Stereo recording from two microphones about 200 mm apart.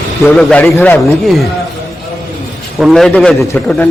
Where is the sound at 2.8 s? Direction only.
Centre (ahead or behind).